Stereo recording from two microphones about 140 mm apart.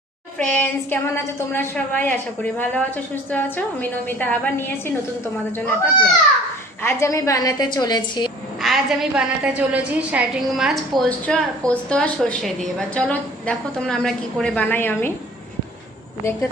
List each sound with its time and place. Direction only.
0.3 s a woman's voice: 15° left (ahead or behind); by 8.3 s 30° left (ahead or behind)
8.6 s a woman's voice: centre (ahead or behind); by 15.1 s 15° left (ahead or behind)